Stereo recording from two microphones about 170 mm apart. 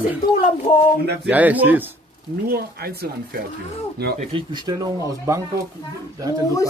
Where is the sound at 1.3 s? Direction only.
10° right (ahead or behind).